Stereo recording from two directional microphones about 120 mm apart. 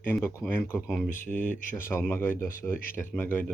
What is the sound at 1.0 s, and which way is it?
Speech, 90° left.